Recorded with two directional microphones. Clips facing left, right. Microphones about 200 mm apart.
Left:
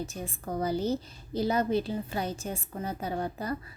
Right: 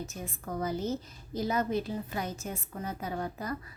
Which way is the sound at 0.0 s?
30° left (ahead or behind).